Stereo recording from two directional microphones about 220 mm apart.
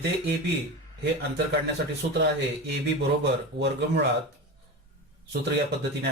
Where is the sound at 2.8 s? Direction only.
50° right (ahead or behind).